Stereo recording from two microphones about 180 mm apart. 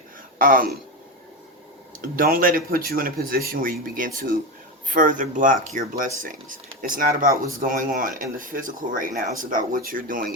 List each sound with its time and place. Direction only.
0.3 s speech: 50° right (ahead or behind)
2.0 s speech: 50° right (ahead or behind)